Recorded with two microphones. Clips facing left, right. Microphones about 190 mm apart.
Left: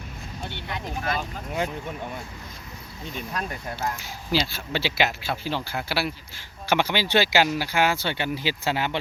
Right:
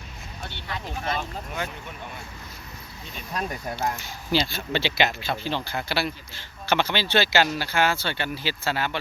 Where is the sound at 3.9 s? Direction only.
5° left (ahead or behind).